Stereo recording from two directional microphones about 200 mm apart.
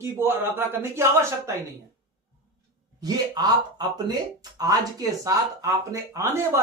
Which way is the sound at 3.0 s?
20° right (ahead or behind).